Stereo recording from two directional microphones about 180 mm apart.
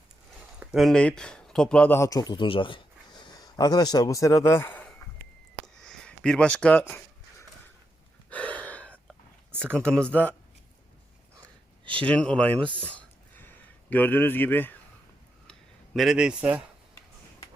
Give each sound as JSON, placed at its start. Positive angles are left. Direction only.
{"t": 0.6, "sound": "speech", "side_deg": 0}
{"t": 5.6, "sound": "a sound", "side_deg": 5}
{"t": 8.3, "sound": "gasp", "side_deg": 10}
{"t": 9.7, "sound": "speech", "side_deg": 5}
{"t": 12.0, "sound": "speech", "side_deg": 5}
{"t": 12.5, "sound": "speech", "side_deg": -30}
{"t": 12.9, "sound": "a sound", "side_deg": 10}